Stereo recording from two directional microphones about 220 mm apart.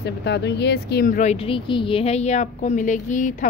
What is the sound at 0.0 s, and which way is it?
Speech, 50° left (ahead or behind).